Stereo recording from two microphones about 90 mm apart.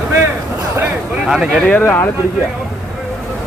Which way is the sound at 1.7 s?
25° left (ahead or behind).